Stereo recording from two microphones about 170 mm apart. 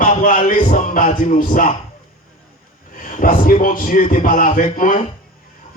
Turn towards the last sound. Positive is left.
turn(degrees=50)  # may be behind; listen again after turning